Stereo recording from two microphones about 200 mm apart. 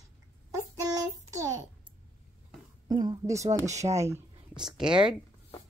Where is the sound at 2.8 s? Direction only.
20° right (ahead or behind).